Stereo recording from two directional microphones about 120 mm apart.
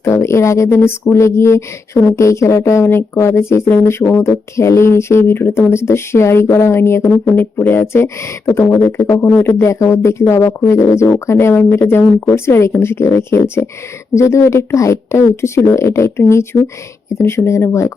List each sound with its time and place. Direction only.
0.0 s speech: 25° left (ahead or behind)